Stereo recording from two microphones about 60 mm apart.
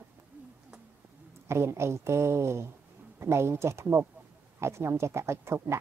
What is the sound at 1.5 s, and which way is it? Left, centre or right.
A woman's voice, right.